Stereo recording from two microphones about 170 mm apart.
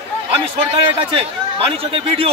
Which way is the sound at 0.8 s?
30° right (ahead or behind).